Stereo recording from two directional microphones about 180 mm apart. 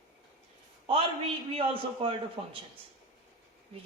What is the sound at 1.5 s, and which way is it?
A man's voice, 30° right (ahead or behind).